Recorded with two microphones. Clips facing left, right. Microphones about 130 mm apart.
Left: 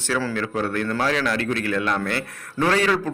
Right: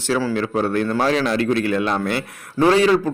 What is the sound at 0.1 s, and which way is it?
A man's voice, 20° right (ahead or behind).